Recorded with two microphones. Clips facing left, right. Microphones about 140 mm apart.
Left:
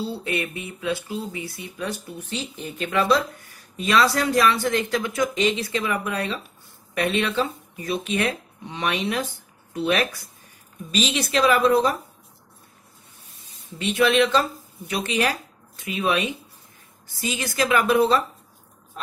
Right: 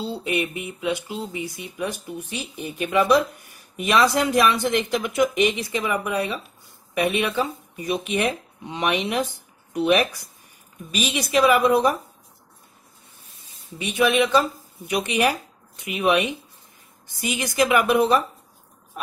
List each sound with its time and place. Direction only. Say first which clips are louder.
0.0 s speech: right 2 dB; 15° right (ahead or behind)
13.7 s speech: left 1 dB; 15° right (ahead or behind)